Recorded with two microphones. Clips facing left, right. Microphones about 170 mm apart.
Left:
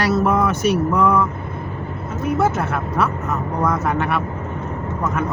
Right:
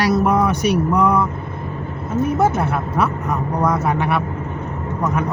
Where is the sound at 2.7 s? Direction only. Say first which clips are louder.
Right 1 dB; 10° right (ahead or behind).